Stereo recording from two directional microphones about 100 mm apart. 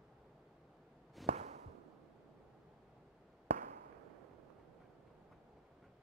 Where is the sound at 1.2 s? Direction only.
Centre (ahead or behind).